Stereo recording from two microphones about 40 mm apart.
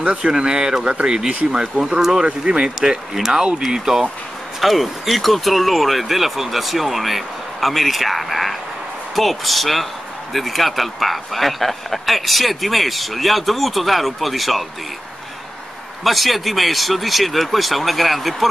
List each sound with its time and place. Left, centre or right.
0.2 s speech: centre
2.0 s speech: centre
2.4 s speech: centre
4.6 s speech: centre
16.0 s speech: centre